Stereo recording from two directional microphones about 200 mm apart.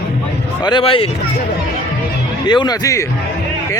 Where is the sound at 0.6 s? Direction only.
20° left (ahead or behind).